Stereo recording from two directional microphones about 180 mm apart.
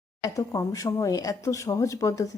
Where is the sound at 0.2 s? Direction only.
15° left (ahead or behind).